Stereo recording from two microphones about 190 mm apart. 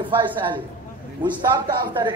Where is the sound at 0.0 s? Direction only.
25° right (ahead or behind).